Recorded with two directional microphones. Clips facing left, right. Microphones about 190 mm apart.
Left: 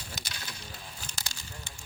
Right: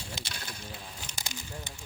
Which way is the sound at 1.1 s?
15° right (ahead or behind).